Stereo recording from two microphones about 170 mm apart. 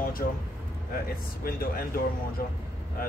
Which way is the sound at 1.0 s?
60° left (ahead or behind).